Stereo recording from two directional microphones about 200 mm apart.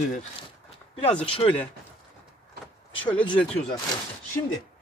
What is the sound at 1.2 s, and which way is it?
Speech, 30° left (ahead or behind).